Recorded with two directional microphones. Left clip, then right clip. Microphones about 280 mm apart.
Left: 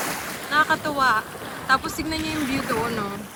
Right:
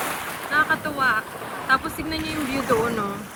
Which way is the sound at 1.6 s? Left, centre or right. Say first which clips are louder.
Even; centre.